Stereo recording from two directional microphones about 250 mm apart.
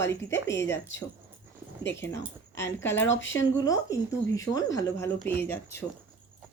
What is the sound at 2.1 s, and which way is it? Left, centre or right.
Speech, centre.